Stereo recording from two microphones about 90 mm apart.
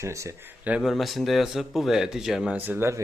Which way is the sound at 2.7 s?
30° right (ahead or behind).